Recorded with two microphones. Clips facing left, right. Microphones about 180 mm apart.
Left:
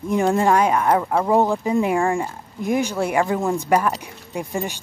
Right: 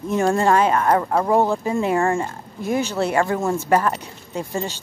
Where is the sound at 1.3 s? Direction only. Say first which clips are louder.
Left 2 dB; 15° left (ahead or behind).